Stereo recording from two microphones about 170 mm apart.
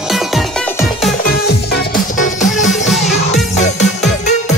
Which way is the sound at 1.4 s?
70° left (ahead or behind).